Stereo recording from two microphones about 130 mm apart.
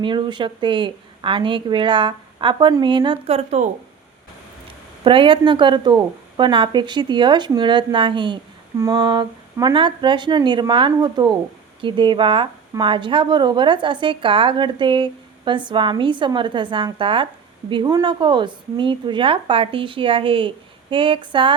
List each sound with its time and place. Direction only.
0.0 s a woman's voice: 40° right (ahead or behind)
3.2 s speech: 50° right (ahead or behind)
5.0 s a woman's voice: 40° right (ahead or behind)